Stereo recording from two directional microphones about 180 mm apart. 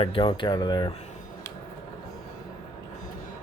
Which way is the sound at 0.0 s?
30° left (ahead or behind).